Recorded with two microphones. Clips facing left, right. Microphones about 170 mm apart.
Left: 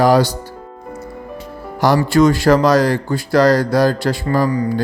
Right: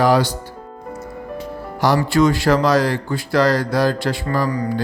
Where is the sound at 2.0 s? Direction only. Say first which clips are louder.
Left 5 dB; 45° left (ahead or behind).